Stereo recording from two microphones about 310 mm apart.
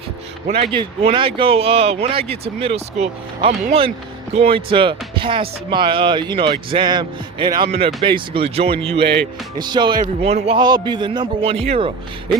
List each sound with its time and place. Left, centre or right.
0.5 s a man's voice: centre